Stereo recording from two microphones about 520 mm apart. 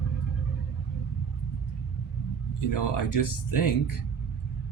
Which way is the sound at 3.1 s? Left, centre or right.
Left.